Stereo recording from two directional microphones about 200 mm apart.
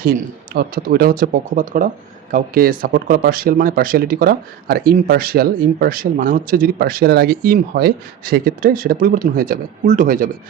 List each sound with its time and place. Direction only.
0.5 s speech: 50° right (ahead or behind)